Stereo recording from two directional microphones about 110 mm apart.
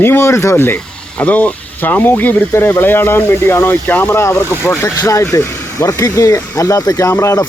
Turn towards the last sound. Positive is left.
turn(degrees=25)  # may be behind; listen again after turning